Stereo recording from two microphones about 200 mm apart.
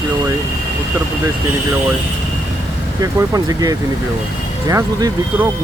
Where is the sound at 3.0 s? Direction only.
20° right (ahead or behind).